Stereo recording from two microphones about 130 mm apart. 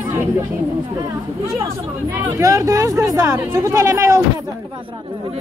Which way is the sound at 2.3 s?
25° right (ahead or behind).